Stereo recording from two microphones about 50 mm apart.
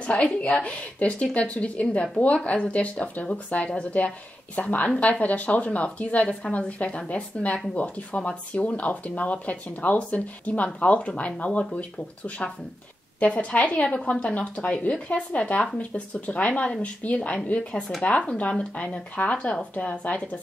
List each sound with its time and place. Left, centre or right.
0.0 s a woman's voice: left
6.4 s a woman's voice: centre
6.8 s speech: left
13.2 s speech: left